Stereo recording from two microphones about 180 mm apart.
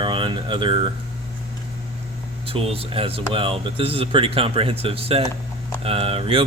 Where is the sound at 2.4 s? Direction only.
30° right (ahead or behind).